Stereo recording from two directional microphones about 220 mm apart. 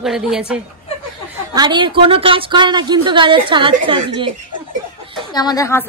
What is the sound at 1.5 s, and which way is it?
Speech, 20° right (ahead or behind).